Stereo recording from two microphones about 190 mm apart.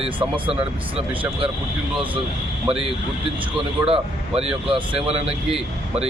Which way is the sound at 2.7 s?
30° right (ahead or behind).